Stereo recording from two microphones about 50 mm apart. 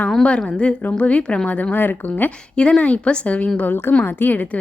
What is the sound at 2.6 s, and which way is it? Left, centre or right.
Speech, left.